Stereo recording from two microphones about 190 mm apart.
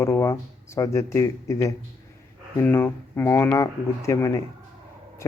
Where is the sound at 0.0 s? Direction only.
15° left (ahead or behind).